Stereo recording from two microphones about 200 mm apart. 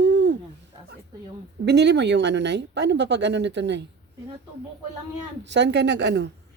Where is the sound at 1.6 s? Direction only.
55° right (ahead or behind).